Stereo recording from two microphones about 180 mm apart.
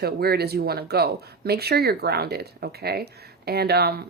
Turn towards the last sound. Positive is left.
turn(degrees=-65)  # may be behind; listen again after turning